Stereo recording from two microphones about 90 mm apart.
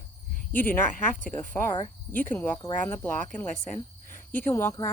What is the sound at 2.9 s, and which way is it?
Speech, 25° left (ahead or behind).